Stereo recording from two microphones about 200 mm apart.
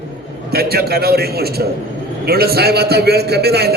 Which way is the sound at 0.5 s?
50° right (ahead or behind).